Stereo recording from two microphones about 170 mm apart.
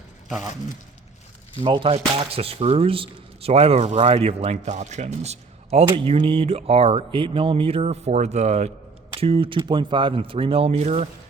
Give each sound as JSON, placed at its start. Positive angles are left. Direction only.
{"t": 1.6, "sound": "speech", "side_deg": -30}